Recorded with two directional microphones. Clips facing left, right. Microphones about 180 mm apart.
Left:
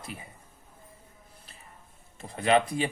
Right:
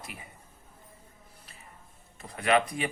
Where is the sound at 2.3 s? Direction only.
30° left (ahead or behind).